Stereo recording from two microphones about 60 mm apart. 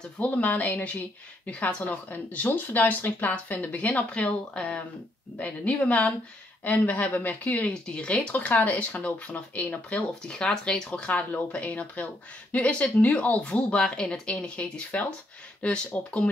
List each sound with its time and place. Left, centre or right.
0.2 s speech: left
7.7 s speech: centre